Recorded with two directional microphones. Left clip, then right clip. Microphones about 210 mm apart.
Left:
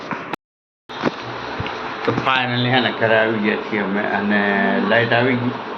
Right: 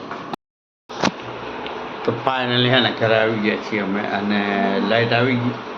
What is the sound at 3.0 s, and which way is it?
Speech, 15° right (ahead or behind).